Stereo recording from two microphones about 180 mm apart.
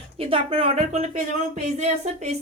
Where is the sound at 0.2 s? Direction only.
30° right (ahead or behind).